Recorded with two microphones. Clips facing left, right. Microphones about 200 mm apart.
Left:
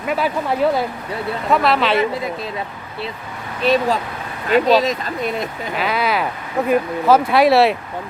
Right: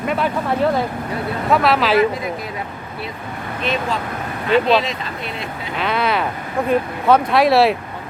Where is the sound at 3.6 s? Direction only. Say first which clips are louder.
Left 6 dB; 35° left (ahead or behind).